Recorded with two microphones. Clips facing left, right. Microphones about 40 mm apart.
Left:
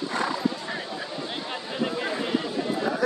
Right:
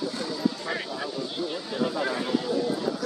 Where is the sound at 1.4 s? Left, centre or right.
Left.